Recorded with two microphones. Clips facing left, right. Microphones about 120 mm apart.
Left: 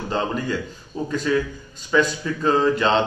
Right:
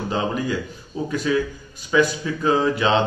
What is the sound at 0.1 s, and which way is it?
A man's voice, 5° right (ahead or behind).